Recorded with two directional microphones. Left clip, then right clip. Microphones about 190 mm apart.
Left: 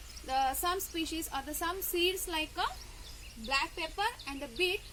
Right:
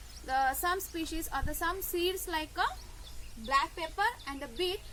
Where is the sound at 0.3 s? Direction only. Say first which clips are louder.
Right 1 dB; 10° left (ahead or behind).